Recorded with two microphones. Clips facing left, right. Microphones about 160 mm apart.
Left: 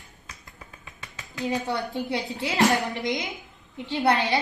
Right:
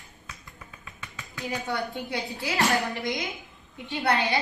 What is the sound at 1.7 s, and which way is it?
A child's voice, 20° left (ahead or behind).